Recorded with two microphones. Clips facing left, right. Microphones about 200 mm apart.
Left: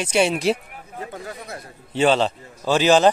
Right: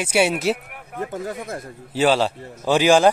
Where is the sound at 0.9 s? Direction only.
50° right (ahead or behind).